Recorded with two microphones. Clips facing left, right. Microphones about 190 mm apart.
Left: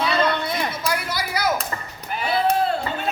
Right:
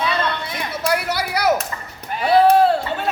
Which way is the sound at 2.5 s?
80° right.